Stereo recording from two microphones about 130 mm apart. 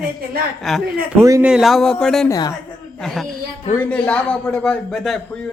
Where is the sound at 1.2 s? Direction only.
25° right (ahead or behind).